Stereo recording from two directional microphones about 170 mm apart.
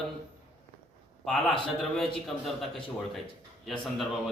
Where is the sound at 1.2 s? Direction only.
Centre (ahead or behind).